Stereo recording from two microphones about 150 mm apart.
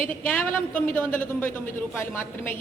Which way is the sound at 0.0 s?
10° left (ahead or behind).